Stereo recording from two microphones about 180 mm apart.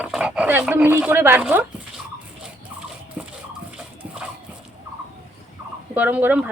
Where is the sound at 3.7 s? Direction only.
5° right (ahead or behind).